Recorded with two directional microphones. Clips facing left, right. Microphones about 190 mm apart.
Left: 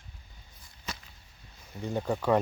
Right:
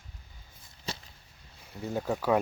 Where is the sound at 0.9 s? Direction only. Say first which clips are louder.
Right 2 dB; 30° right (ahead or behind).